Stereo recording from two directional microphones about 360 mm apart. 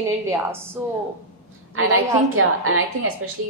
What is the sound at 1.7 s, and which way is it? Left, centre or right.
A woman's voice, right.